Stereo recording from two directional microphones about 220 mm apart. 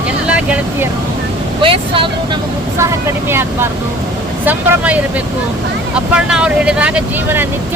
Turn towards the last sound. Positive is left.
turn(degrees=-10)  # may be behind; listen again after turning